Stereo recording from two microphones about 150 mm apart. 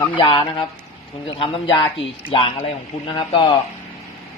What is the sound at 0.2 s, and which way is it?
Speech, 35° left (ahead or behind).